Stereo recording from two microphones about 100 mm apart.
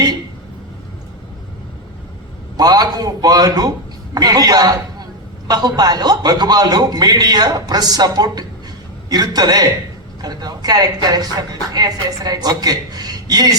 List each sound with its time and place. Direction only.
2.6 s a man's voice: 40° right (ahead or behind)